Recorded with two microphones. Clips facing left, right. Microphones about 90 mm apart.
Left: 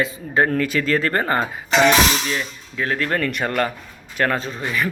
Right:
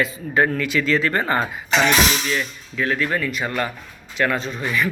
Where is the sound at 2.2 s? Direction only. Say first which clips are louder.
Right 1 dB; 35° left (ahead or behind).